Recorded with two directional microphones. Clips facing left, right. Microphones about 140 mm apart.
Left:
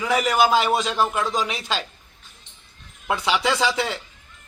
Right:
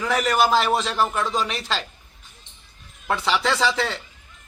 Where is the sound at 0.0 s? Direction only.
5° left (ahead or behind).